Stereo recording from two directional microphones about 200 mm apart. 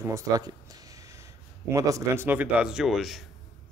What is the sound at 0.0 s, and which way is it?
Speech, 15° right (ahead or behind).